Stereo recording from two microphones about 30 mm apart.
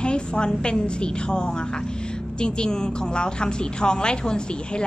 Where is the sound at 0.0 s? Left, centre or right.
Left.